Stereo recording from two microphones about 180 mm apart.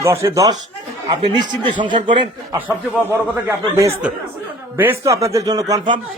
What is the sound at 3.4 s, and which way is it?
A man's voice, 15° right (ahead or behind).